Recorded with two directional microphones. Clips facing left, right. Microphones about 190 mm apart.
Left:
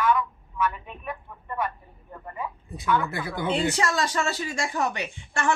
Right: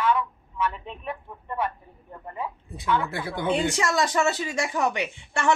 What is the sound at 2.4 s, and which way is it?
A woman's voice, 25° right (ahead or behind).